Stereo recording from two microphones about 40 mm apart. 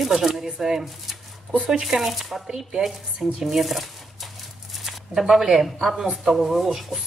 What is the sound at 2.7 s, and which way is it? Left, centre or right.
Speech, centre.